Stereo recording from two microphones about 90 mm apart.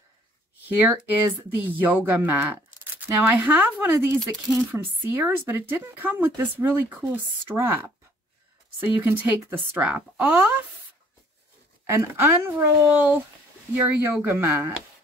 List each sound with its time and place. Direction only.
0.7 s speech: 20° right (ahead or behind)
11.8 s speech: 30° right (ahead or behind)